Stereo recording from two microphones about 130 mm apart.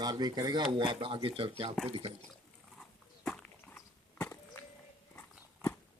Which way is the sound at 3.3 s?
5° left (ahead or behind).